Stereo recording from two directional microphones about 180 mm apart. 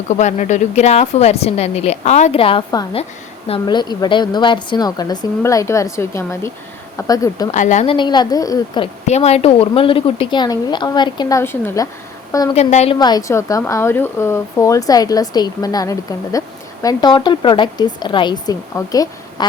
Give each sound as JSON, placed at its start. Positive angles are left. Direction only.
{"t": 0.1, "sound": "speech", "side_deg": 40}
{"t": 7.5, "sound": "a woman's voice", "side_deg": 45}
{"t": 7.9, "sound": "speech", "side_deg": 25}
{"t": 9.0, "sound": "speech", "side_deg": 35}
{"t": 12.5, "sound": "a woman's voice", "side_deg": 35}
{"t": 13.0, "sound": "speech", "side_deg": 20}